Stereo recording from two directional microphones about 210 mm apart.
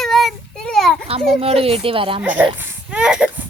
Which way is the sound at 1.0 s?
30° right (ahead or behind).